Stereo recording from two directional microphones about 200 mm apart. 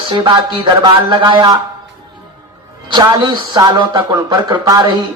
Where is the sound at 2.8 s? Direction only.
20° right (ahead or behind).